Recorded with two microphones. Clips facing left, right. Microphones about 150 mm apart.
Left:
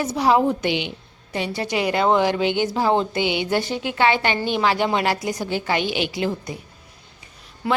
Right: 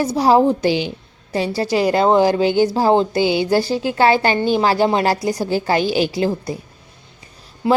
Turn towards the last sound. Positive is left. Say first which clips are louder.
# right 6 dB
turn(degrees=-25)  # may be behind; listen again after turning